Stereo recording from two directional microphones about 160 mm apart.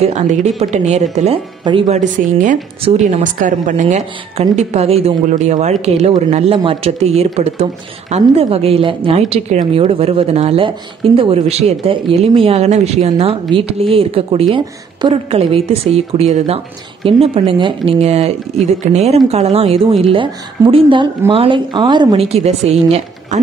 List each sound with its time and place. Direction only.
0.0 s a woman's voice: 45° right (ahead or behind)
1.6 s speech: 30° right (ahead or behind)
1.9 s a woman's voice: 50° right (ahead or behind)
2.8 s a woman's voice: 45° right (ahead or behind)